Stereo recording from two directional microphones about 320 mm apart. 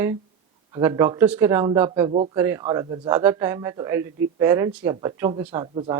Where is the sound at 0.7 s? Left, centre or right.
Centre.